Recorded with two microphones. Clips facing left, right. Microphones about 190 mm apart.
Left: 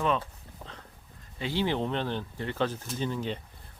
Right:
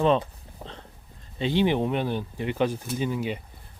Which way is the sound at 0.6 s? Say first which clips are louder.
Right 5 dB; 30° right (ahead or behind).